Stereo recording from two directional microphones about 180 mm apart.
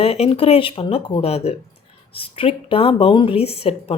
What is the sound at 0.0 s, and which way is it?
Speech, 35° left (ahead or behind).